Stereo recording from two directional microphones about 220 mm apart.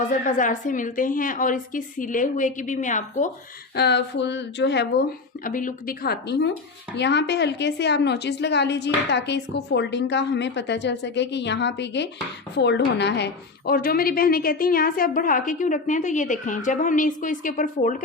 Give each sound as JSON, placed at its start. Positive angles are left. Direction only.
{"t": 0.1, "sound": "a woman's voice", "side_deg": 35}
{"t": 3.8, "sound": "a woman's voice", "side_deg": 50}